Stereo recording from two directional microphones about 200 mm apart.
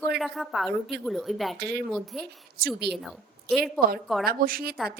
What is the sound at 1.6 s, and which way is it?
Speech, 55° right (ahead or behind).